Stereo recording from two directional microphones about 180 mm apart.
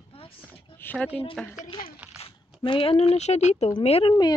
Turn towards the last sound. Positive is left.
turn(degrees=25)  # may be behind; listen again after turning